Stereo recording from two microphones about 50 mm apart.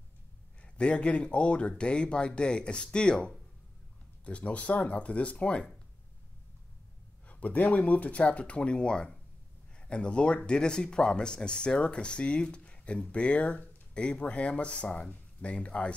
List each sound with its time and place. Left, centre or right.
0.6 s speech: left
7.2 s speech: left